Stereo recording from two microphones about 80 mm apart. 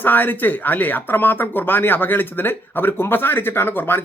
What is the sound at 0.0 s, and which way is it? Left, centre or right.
Speech, left.